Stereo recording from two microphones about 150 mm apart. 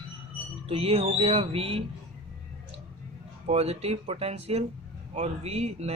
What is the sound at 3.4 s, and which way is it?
Speech, 45° right (ahead or behind).